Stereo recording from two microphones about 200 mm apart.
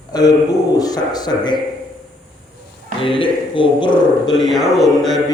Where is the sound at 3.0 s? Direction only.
25° left (ahead or behind).